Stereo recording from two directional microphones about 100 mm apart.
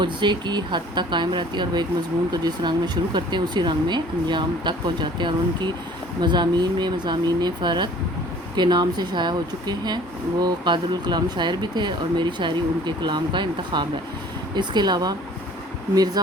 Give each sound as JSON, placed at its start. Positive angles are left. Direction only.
{"t": 0.0, "sound": "speech", "side_deg": -50}
{"t": 16.2, "sound": "speech", "side_deg": -40}